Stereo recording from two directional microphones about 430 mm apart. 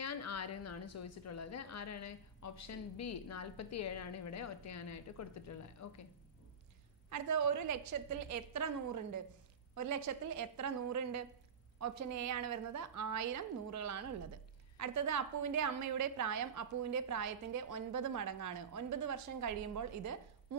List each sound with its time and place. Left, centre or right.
0.0 s a woman's voice: left
7.1 s a woman's voice: right
9.7 s a woman's voice: right